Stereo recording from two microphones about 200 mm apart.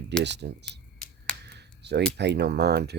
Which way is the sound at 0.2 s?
60° right (ahead or behind).